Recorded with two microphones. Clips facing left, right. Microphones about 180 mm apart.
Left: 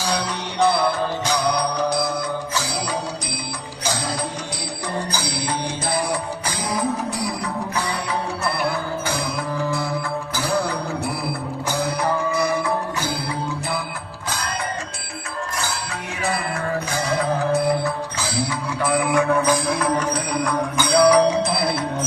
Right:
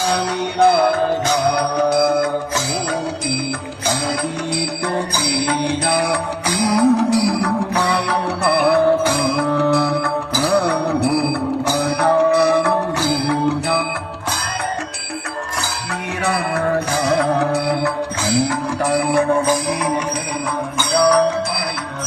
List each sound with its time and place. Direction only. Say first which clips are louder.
0.6 s music: right 5 dB; 50° right (ahead or behind)
5.2 s music: right 7 dB; 60° right (ahead or behind)
16.2 s music: right 5 dB; 65° right (ahead or behind)
18.3 s music: right 5 dB; 40° right (ahead or behind)
20.9 s music: even; 10° left (ahead or behind)